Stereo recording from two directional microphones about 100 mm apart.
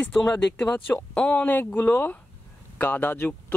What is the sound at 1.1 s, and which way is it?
Speech, 10° left (ahead or behind).